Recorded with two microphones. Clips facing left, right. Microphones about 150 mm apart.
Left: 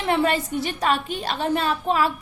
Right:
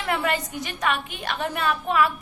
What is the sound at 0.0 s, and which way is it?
A woman's voice, 25° left (ahead or behind).